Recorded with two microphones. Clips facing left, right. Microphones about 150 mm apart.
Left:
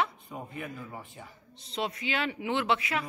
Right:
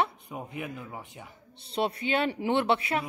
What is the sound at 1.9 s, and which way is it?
Speech, 35° right (ahead or behind).